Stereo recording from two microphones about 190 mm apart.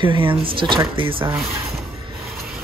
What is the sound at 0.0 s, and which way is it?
A man's voice, 25° right (ahead or behind).